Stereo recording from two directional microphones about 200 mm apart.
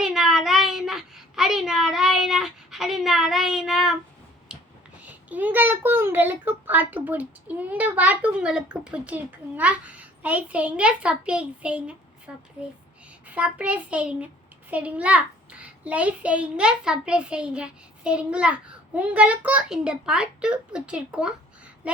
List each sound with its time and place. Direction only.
0.0 s child singing: centre (ahead or behind)
4.5 s a sound: 5° right (ahead or behind)
4.9 s a child's voice: 5° right (ahead or behind)